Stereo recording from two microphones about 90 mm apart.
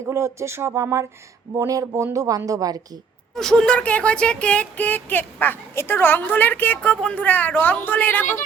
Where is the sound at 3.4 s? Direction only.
5° left (ahead or behind).